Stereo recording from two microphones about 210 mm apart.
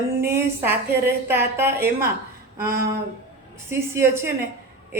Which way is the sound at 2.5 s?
45° right (ahead or behind).